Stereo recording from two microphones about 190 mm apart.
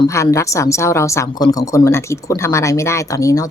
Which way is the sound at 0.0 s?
15° left (ahead or behind).